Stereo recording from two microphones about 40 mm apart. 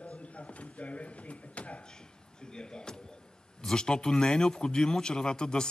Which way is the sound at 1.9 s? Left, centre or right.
Centre.